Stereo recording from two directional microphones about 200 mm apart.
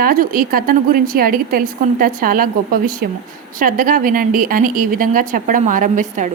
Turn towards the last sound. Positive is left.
turn(degrees=-40)  # may be behind; listen again after turning